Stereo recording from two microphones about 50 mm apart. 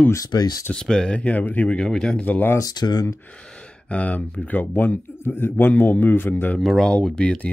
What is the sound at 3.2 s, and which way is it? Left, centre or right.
Speech, left.